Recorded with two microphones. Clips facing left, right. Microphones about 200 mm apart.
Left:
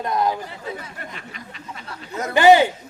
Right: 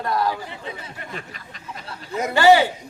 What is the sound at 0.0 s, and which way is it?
Speech, 20° left (ahead or behind).